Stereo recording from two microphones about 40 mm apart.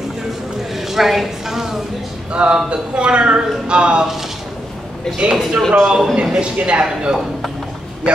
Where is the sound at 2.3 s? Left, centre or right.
Right.